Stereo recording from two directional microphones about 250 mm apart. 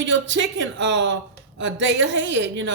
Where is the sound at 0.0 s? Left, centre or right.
Right.